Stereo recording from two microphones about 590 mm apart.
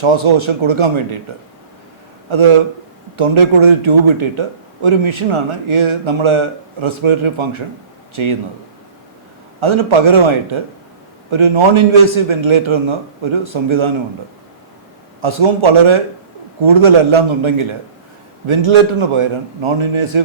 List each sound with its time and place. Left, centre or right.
0.0 s a man's voice: right
2.3 s a man's voice: right
9.6 s a man's voice: right
15.2 s a man's voice: right